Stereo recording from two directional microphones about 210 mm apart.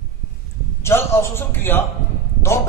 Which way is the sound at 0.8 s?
15° left (ahead or behind).